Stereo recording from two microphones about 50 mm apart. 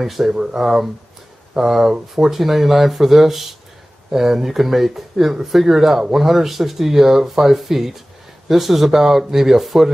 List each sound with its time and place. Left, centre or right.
0.0 s speech: centre